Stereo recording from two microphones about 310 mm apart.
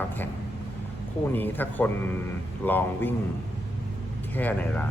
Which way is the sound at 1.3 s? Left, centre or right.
Centre.